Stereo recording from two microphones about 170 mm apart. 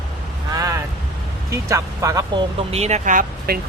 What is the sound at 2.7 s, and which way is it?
Speech, 40° right (ahead or behind).